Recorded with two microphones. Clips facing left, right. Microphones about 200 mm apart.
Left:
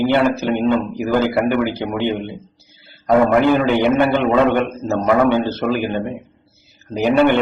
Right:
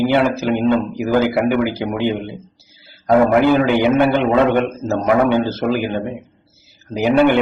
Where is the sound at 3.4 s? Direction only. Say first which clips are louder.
Right 1 dB; 10° right (ahead or behind).